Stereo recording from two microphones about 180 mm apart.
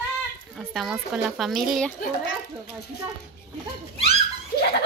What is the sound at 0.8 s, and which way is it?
Speech, 5° right (ahead or behind).